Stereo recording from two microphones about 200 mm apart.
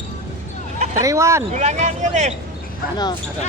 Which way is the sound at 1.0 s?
15° right (ahead or behind).